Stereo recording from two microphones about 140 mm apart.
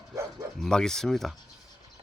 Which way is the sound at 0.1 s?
25° right (ahead or behind).